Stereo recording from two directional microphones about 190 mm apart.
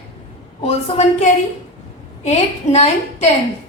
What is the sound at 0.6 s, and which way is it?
Speech, 35° left (ahead or behind).